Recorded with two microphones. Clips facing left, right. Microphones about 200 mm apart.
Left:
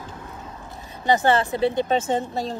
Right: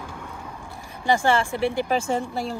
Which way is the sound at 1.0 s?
20° left (ahead or behind).